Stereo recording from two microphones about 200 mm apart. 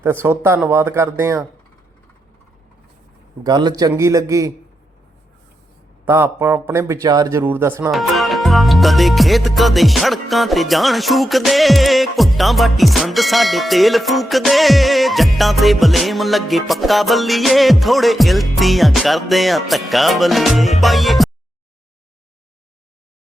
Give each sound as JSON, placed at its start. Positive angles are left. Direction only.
{"t": 0.0, "sound": "speech", "side_deg": -10}
{"t": 3.4, "sound": "speech", "side_deg": -20}
{"t": 6.1, "sound": "speech", "side_deg": -10}
{"t": 7.9, "sound": "music", "side_deg": 0}